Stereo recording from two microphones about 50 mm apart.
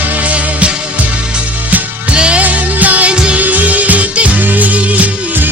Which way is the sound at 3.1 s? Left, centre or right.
Centre.